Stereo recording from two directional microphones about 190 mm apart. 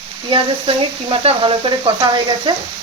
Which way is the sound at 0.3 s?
25° right (ahead or behind).